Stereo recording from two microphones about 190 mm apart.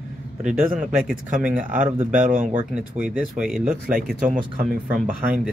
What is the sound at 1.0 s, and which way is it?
Speech, 5° right (ahead or behind).